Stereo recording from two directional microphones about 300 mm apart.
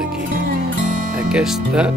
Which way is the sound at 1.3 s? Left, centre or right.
Centre.